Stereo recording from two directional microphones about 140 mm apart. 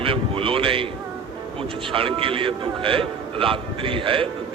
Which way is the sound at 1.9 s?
40° right (ahead or behind).